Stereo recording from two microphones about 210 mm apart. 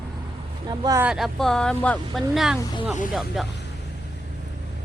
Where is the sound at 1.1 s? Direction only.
Centre (ahead or behind).